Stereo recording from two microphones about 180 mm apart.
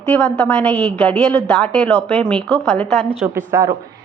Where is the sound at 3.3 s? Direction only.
15° right (ahead or behind).